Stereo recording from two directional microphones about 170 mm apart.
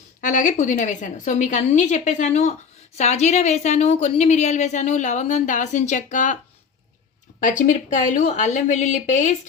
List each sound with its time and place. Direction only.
0.2 s a woman's voice: 50° left (ahead or behind)
7.3 s a woman's voice: 50° left (ahead or behind)